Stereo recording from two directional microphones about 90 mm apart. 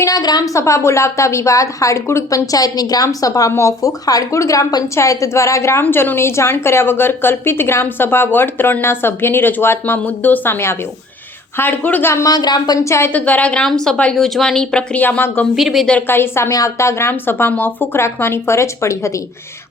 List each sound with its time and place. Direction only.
0.0 s a woman's voice: 45° left (ahead or behind); by 12.1 s 20° left (ahead or behind)
12.1 s speech: 40° left (ahead or behind)
12.8 s a woman's voice: 35° left (ahead or behind)
13.1 s speech: 15° left (ahead or behind)
15.0 s a woman's voice: 20° left (ahead or behind)
15.5 s speech: centre (ahead or behind)
16.0 s a woman's voice: 25° left (ahead or behind)